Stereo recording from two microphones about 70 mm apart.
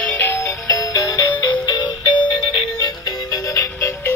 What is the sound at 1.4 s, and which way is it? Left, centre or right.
Music, left.